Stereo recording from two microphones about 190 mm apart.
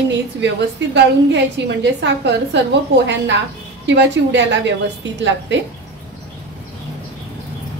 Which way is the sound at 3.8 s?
70° right (ahead or behind).